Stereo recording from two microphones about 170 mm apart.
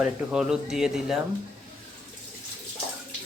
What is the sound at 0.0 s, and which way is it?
Speech, 5° right (ahead or behind).